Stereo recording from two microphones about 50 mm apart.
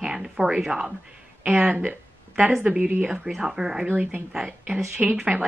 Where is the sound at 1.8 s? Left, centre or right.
Right.